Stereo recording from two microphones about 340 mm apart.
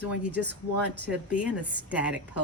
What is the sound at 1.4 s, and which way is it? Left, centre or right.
Speech, centre.